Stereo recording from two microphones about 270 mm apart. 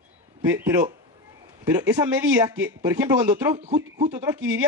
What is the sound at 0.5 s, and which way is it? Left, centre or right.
A man's voice, centre.